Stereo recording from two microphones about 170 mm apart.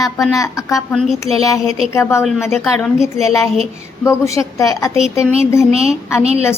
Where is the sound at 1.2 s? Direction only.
20° left (ahead or behind).